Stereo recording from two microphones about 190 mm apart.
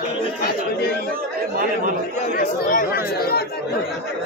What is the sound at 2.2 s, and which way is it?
Speech, 45° left (ahead or behind).